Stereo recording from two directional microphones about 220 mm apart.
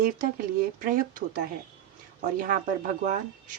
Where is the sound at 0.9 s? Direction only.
40° right (ahead or behind).